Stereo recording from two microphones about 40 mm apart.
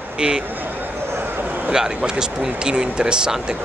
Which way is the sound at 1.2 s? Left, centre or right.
Right.